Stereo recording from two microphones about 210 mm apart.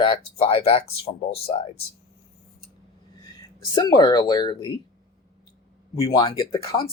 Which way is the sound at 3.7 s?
20° left (ahead or behind).